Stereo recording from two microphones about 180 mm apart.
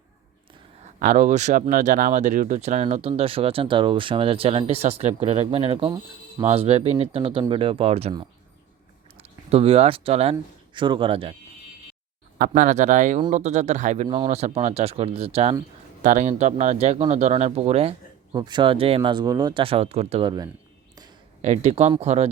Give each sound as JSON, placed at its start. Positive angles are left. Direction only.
{"t": 0.9, "sound": "speech", "side_deg": -45}
{"t": 9.5, "sound": "speech", "side_deg": -35}
{"t": 12.4, "sound": "speech", "side_deg": -45}
{"t": 21.4, "sound": "speech", "side_deg": -40}